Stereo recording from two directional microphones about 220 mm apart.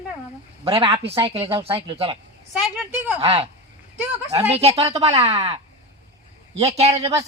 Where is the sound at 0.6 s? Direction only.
25° right (ahead or behind).